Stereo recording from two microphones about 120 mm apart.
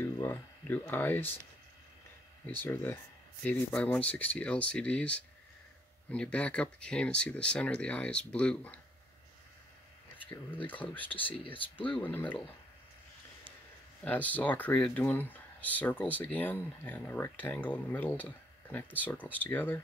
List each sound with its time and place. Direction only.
0.0 s speech: 20° left (ahead or behind)
2.6 s speech: 20° left (ahead or behind)
10.3 s speech: 15° left (ahead or behind)
14.0 s speech: 15° left (ahead or behind)